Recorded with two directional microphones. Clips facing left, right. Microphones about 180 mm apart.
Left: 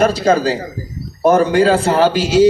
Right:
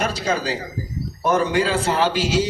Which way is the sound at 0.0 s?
45° left (ahead or behind).